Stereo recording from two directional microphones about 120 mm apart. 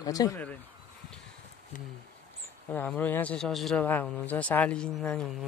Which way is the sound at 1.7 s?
90° left.